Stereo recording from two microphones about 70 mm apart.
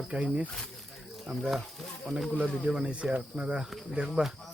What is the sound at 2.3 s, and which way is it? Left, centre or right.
Speech, centre.